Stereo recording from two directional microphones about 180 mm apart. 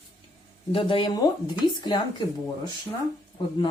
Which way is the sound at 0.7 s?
30° left (ahead or behind).